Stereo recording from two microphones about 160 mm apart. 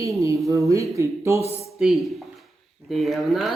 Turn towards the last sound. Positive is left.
turn(degrees=0)  # may be behind; listen again after turning